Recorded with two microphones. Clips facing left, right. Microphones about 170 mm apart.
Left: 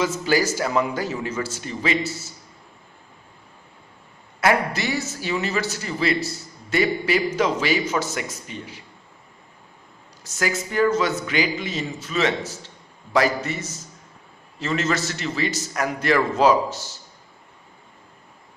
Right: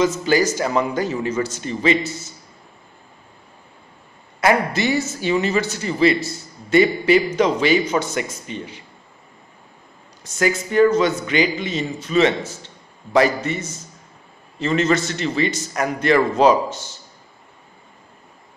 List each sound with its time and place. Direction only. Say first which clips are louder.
0.0 s a man's voice: right 4 dB; 10° left (ahead or behind)
4.4 s a man's voice: right 3 dB; centre (ahead or behind)
10.2 s a man's voice: right 5 dB; centre (ahead or behind)